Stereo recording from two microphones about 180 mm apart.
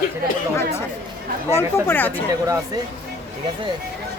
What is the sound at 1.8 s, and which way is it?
Speech, 10° left (ahead or behind).